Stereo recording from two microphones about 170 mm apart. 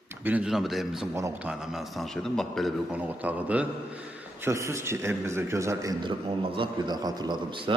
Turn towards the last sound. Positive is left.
turn(degrees=-30)  # may be behind; listen again after turning